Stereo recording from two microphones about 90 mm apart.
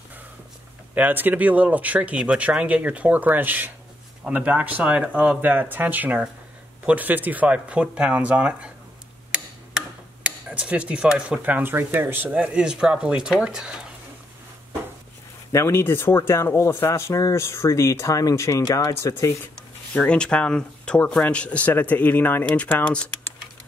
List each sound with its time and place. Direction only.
0.9 s speech: 20° right (ahead or behind)
10.5 s speech: 15° right (ahead or behind)
15.5 s speech: 30° left (ahead or behind)
19.9 s speech: 10° left (ahead or behind)